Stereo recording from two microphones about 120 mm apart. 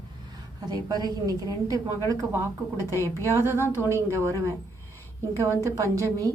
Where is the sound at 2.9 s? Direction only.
25° left (ahead or behind).